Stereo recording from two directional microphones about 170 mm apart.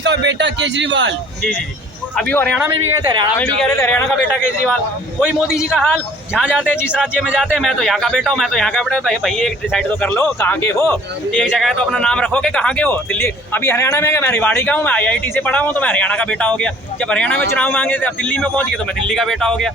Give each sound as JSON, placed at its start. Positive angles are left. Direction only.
{"t": 0.0, "sound": "speech", "side_deg": -90}
{"t": 2.1, "sound": "speech", "side_deg": 5}
{"t": 3.0, "sound": "speech", "side_deg": -25}
{"t": 3.3, "sound": "speech", "side_deg": 5}
{"t": 5.5, "sound": "speech", "side_deg": -5}
{"t": 11.3, "sound": "speech", "side_deg": 0}